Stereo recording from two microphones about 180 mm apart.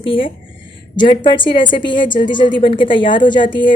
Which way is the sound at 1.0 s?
45° left (ahead or behind).